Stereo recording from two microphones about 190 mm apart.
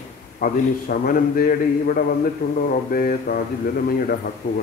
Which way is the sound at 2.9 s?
50° left (ahead or behind).